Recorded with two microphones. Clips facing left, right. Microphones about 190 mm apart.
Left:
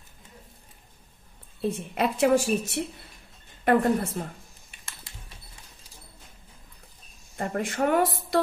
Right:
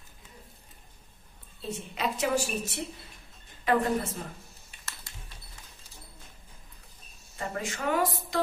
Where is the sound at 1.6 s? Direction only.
60° left (ahead or behind).